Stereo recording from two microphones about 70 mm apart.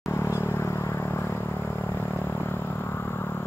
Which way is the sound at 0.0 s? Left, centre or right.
Left.